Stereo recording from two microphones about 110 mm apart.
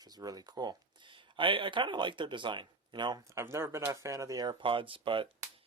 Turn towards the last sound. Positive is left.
turn(degrees=-50)  # may be behind; listen again after turning